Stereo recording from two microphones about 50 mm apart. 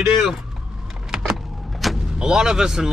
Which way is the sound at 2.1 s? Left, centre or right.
Centre.